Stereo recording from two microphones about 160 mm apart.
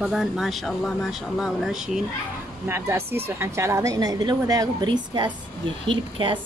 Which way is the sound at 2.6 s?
15° right (ahead or behind).